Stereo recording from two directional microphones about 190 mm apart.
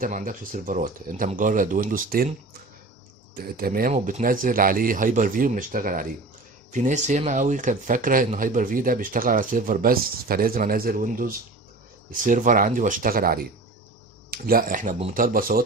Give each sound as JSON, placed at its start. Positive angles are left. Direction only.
{"t": 0.0, "sound": "speech", "side_deg": -45}
{"t": 3.3, "sound": "speech", "side_deg": -50}